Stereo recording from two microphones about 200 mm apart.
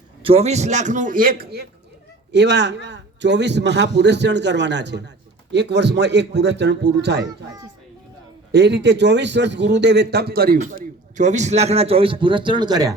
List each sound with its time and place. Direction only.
0.2 s a man's voice: 30° right (ahead or behind); by 1.6 s 45° right (ahead or behind)
2.3 s a man's voice: 60° right (ahead or behind)
7.2 s a child's voice: 20° right (ahead or behind)
8.5 s a man's voice: 55° right (ahead or behind); by 12.9 s 20° right (ahead or behind)